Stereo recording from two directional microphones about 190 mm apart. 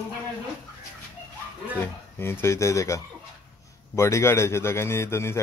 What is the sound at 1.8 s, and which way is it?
A man's voice, 10° left (ahead or behind).